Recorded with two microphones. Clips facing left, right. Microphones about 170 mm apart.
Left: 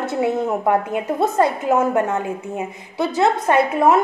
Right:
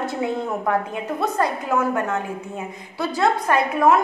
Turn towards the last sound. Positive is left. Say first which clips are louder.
# left 2 dB
turn(degrees=25)  # may be behind; listen again after turning